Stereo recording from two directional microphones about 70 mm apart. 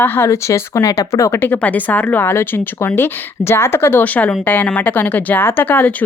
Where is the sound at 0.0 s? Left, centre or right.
Left.